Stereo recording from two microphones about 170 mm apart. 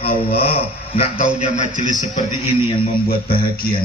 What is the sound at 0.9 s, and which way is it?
Speech, 40° left (ahead or behind).